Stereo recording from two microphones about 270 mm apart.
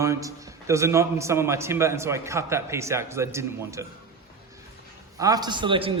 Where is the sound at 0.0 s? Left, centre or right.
Centre.